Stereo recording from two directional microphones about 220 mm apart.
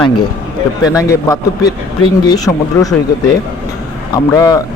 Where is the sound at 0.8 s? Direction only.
15° left (ahead or behind).